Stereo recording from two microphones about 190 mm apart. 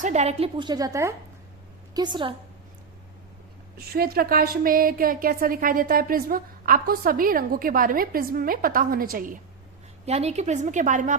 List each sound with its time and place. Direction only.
0.0 s a woman's voice: 40° right (ahead or behind); by 2.3 s 20° right (ahead or behind)
3.9 s speech: 50° right (ahead or behind)
10.1 s a woman's voice: 35° right (ahead or behind)